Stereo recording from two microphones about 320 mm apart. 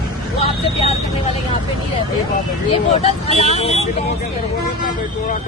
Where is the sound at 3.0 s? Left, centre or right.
Centre.